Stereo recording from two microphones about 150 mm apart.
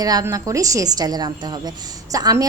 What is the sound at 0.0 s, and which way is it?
A woman's voice, 25° right (ahead or behind).